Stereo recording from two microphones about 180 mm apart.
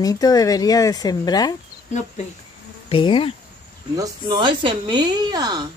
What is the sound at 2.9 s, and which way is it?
Speech, 30° left (ahead or behind).